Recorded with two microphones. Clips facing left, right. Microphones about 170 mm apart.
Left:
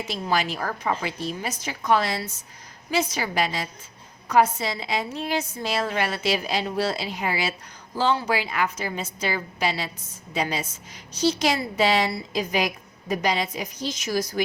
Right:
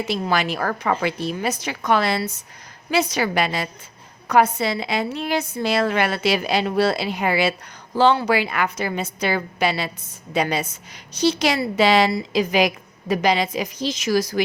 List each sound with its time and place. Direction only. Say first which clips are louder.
0.1 s a woman's voice: right 2 dB; 65° right (ahead or behind); by 14.4 s 90° right